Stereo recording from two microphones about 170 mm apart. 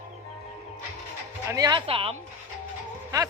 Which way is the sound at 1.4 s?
20° right (ahead or behind).